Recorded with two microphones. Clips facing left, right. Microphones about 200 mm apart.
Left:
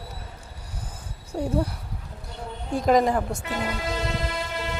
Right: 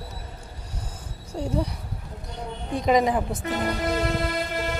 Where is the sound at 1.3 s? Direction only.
5° left (ahead or behind).